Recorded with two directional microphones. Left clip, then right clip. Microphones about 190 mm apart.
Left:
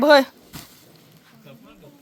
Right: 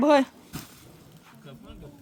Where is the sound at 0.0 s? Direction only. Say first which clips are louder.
Left 6 dB; centre (ahead or behind).